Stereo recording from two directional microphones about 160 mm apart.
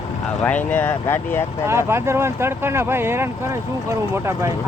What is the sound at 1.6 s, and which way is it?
Speech, 15° right (ahead or behind).